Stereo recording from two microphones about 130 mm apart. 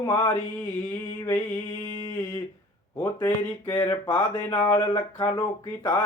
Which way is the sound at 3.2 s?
30° left (ahead or behind).